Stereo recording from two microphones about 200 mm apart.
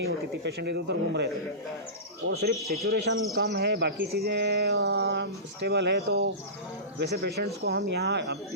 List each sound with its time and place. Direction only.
0.0 s bird: 55° right (ahead or behind)
2.3 s speech: 50° right (ahead or behind)
3.3 s bird: 55° right (ahead or behind)